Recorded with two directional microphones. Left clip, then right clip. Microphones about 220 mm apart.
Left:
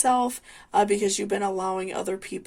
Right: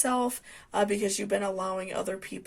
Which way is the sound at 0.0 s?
45° left (ahead or behind).